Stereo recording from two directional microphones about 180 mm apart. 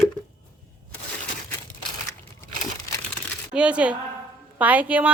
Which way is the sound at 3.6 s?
5° right (ahead or behind).